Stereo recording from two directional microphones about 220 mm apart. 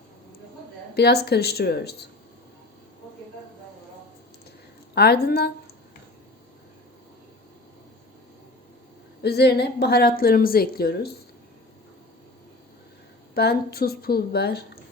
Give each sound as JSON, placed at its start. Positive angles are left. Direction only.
{"t": 0.9, "sound": "a woman's voice", "side_deg": 45}
{"t": 4.9, "sound": "a woman's voice", "side_deg": 45}
{"t": 9.2, "sound": "a woman's voice", "side_deg": 45}
{"t": 13.3, "sound": "a woman's voice", "side_deg": 45}